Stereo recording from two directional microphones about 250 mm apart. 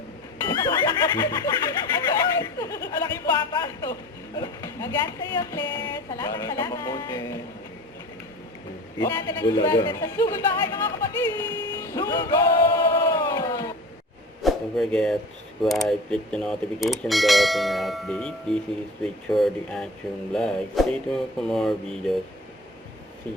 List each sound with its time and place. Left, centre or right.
0.4 s snicker: centre
3.0 s speech: centre
9.0 s speech: centre
14.4 s speech: centre